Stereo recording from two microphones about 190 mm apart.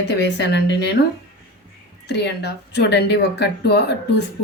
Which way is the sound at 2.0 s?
60° left (ahead or behind).